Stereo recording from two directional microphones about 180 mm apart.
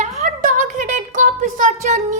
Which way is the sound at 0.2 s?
45° right (ahead or behind).